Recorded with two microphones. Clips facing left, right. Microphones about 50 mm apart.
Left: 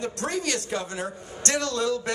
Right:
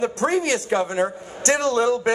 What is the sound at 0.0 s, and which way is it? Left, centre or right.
A man's voice, right.